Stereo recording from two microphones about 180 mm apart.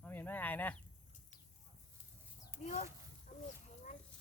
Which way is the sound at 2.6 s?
40° left (ahead or behind).